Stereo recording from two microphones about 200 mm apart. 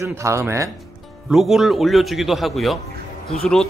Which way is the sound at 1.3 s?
Centre (ahead or behind).